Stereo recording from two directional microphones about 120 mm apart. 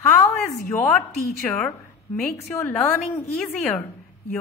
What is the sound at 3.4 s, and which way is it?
Speech, 5° left (ahead or behind).